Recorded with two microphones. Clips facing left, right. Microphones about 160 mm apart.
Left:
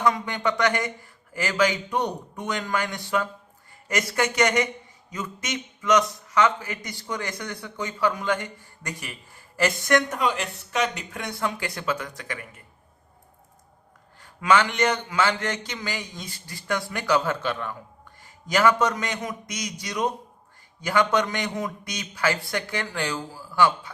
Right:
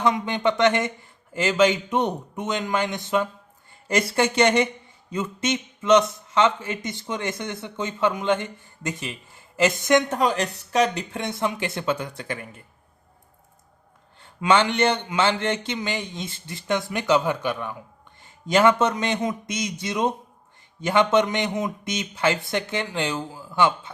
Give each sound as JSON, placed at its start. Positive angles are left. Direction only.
{"t": 0.0, "sound": "a man's voice", "side_deg": -25}
{"t": 10.2, "sound": "a man's voice", "side_deg": -40}
{"t": 14.2, "sound": "a man's voice", "side_deg": -25}
{"t": 18.2, "sound": "a man's voice", "side_deg": -25}